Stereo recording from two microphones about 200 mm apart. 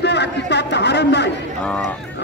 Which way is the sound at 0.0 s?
55° left (ahead or behind).